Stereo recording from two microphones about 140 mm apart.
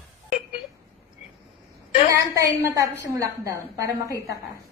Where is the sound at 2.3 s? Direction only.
20° right (ahead or behind).